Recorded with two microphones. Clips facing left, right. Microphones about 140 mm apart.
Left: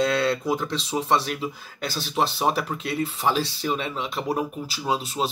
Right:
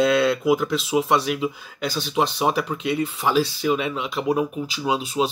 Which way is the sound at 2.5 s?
40° left (ahead or behind).